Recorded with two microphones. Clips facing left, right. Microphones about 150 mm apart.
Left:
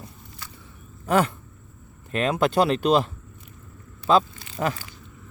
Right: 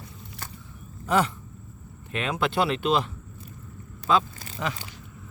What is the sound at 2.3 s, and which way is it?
Speech, 40° left (ahead or behind).